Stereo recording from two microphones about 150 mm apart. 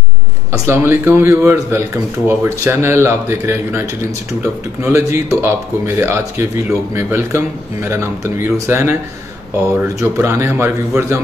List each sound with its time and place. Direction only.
0.5 s speech: 15° right (ahead or behind)